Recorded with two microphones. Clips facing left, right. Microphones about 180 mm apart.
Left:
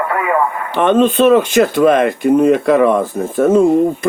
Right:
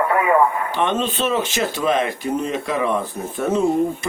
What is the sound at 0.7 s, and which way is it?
Speech, 50° left (ahead or behind).